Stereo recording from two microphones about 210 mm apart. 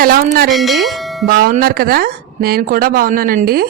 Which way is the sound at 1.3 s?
45° right (ahead or behind).